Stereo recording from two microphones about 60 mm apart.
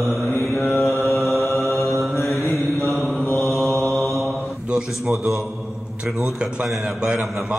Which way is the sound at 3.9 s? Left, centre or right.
Right.